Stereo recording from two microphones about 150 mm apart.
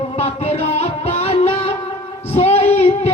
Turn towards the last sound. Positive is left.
turn(degrees=45)  # may be behind; listen again after turning